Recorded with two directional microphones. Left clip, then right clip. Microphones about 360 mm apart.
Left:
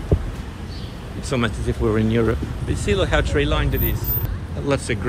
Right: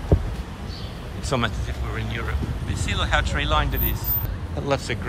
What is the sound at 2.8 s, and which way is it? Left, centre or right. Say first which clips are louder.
Speech: left 3 dB; centre.